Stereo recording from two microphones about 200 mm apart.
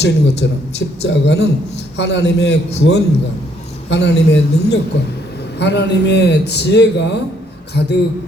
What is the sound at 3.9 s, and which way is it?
A man's voice, 60° left (ahead or behind).